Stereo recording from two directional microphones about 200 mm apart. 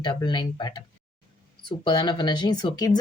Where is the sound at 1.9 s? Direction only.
20° left (ahead or behind).